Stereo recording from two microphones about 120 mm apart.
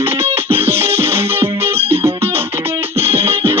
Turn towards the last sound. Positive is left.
turn(degrees=-55)  # may be behind; listen again after turning